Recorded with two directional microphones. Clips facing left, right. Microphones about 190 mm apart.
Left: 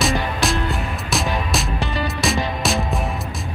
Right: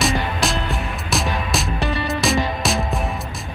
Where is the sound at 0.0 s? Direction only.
Centre (ahead or behind).